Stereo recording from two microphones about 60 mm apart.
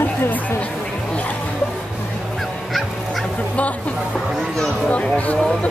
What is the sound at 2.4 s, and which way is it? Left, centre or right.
Fowl, centre.